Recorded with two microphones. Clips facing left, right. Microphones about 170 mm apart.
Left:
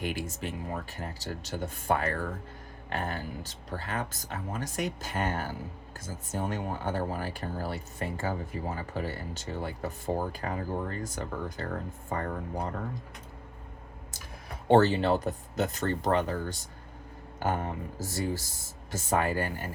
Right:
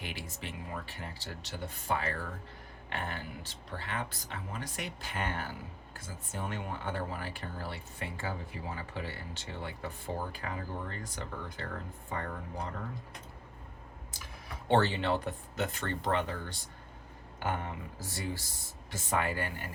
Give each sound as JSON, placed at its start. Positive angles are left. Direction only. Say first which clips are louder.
{"t": 0.0, "sound": "speech", "louder": "left 8 dB", "side_deg": 45}
{"t": 14.7, "sound": "speech", "louder": "left 6 dB", "side_deg": 40}